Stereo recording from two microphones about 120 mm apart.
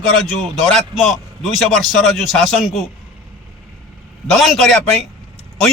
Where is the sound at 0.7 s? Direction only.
Centre (ahead or behind).